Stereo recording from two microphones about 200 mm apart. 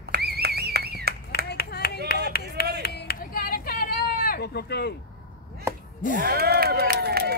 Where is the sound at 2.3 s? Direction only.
50° left (ahead or behind).